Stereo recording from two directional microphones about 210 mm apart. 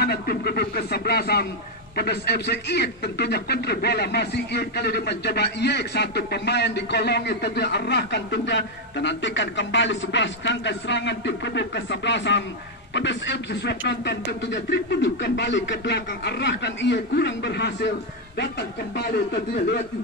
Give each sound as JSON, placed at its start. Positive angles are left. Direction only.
{"t": 0.0, "sound": "a man's voice", "side_deg": 50}